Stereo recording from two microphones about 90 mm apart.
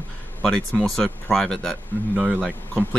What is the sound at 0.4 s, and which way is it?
Speech, 5° left (ahead or behind).